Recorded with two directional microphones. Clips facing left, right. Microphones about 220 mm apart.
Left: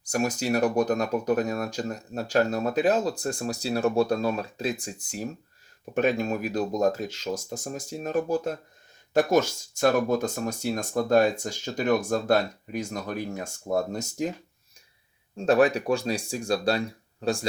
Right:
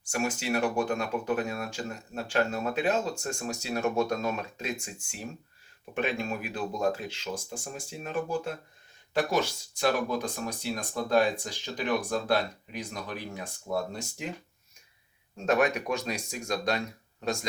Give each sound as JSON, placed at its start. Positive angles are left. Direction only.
{"t": 0.0, "sound": "speech", "side_deg": 40}
{"t": 15.4, "sound": "speech", "side_deg": 30}